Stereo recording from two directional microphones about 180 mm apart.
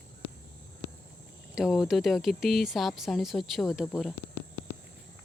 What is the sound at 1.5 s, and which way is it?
Speech, centre (ahead or behind).